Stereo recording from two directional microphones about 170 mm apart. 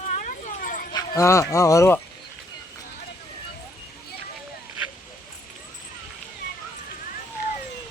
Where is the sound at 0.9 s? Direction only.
20° left (ahead or behind).